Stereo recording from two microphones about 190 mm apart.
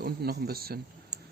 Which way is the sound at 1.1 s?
5° right (ahead or behind).